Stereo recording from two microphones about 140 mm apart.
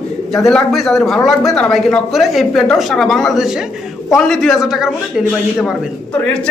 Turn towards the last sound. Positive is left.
turn(degrees=-5)  # may be behind; listen again after turning